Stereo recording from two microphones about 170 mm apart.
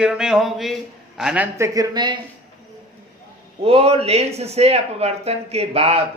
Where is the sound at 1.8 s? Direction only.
25° right (ahead or behind).